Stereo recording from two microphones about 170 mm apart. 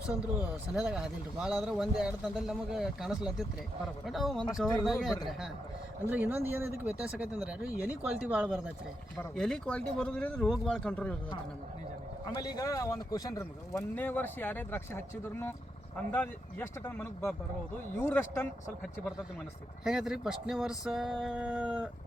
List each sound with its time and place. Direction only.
0.1 s speech: 5° right (ahead or behind)
9.1 s speech: 5° left (ahead or behind)
12.2 s speech: 20° left (ahead or behind)
19.8 s speech: 5° right (ahead or behind)